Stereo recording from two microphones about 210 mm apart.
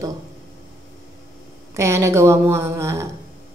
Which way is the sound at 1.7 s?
15° right (ahead or behind).